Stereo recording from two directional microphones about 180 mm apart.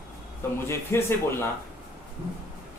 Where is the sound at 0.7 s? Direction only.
15° left (ahead or behind).